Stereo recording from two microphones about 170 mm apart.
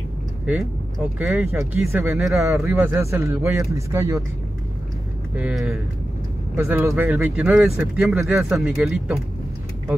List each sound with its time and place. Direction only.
0.5 s speech: centre (ahead or behind)
1.3 s speech: 15° right (ahead or behind)
2.1 s speech: centre (ahead or behind)
2.4 s speech: 15° right (ahead or behind)
5.3 s speech: 5° right (ahead or behind)
6.5 s speech: 15° right (ahead or behind)